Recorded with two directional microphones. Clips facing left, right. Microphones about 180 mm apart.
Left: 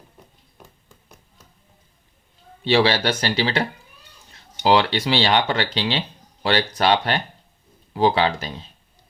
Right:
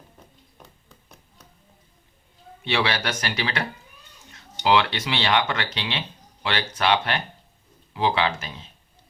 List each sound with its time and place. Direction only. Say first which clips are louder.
2.6 s speech: left 7 dB; 30° left (ahead or behind)